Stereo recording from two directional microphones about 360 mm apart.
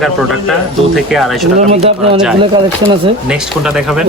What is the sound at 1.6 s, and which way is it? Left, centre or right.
Speech, centre.